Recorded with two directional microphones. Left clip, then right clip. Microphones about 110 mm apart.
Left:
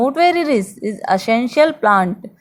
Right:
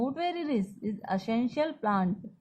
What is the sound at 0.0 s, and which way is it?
A woman's voice, 45° left (ahead or behind).